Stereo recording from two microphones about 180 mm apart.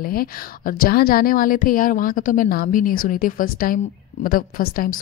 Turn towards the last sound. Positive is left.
turn(degrees=50)  # may be behind; listen again after turning